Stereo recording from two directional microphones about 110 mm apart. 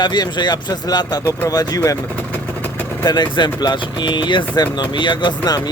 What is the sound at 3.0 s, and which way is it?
Speech, 40° left (ahead or behind).